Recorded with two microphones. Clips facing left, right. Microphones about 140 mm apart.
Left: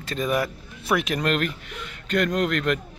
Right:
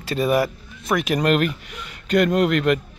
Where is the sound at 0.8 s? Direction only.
5° left (ahead or behind).